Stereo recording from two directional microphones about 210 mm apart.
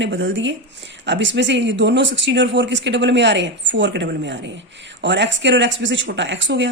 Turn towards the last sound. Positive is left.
turn(degrees=-60)  # may be behind; listen again after turning